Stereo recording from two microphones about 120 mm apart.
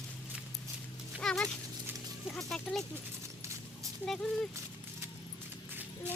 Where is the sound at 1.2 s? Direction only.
5° left (ahead or behind).